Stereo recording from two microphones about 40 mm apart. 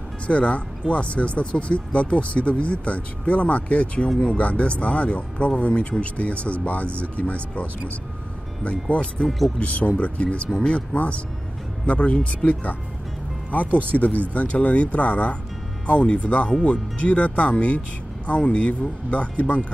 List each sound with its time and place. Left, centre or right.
0.3 s speech: left
8.6 s speech: left
13.9 s speech: left